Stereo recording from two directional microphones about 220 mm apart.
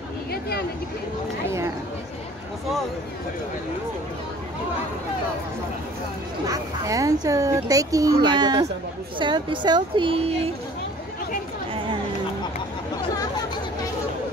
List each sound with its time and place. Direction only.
6.4 s a woman's voice: 15° right (ahead or behind)